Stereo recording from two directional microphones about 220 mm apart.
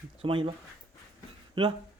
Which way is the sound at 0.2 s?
25° right (ahead or behind).